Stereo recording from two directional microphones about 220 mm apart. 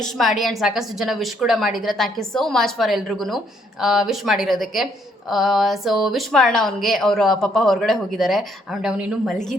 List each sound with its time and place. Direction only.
0.0 s a woman's voice: centre (ahead or behind)